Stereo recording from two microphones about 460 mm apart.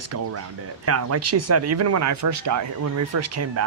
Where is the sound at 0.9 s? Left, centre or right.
Right.